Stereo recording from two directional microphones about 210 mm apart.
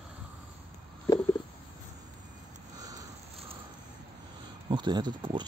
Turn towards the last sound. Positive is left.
turn(degrees=-20)  # may be behind; listen again after turning